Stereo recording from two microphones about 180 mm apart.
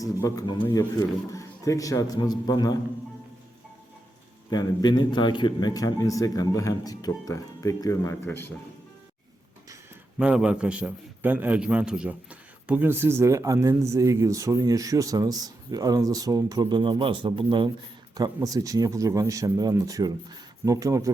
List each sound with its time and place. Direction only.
0.0 s a man's voice: 20° left (ahead or behind)
4.5 s a man's voice: 25° left (ahead or behind)
10.2 s a man's voice: 5° right (ahead or behind)